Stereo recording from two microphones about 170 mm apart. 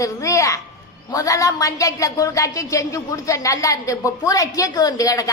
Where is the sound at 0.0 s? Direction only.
20° left (ahead or behind).